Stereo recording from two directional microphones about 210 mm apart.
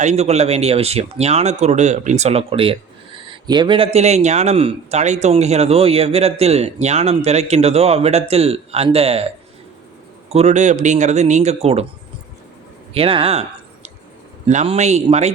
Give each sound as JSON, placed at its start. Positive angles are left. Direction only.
{"t": 0.0, "sound": "speech", "side_deg": -30}
{"t": 10.2, "sound": "speech", "side_deg": -30}
{"t": 12.9, "sound": "speech", "side_deg": -25}
{"t": 14.4, "sound": "speech", "side_deg": -35}